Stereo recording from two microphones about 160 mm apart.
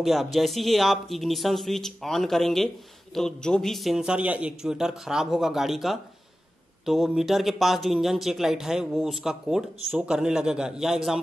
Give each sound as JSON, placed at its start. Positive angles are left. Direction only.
{"t": 0.0, "sound": "speech", "side_deg": 0}